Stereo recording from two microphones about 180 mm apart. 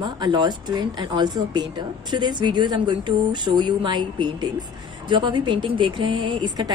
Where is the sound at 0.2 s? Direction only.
25° right (ahead or behind).